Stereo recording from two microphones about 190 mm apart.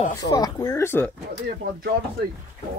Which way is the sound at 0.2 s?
20° left (ahead or behind).